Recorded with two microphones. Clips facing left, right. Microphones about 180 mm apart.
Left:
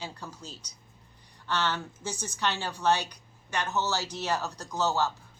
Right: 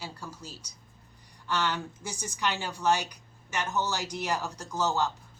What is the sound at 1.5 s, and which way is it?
A woman's voice, 10° right (ahead or behind).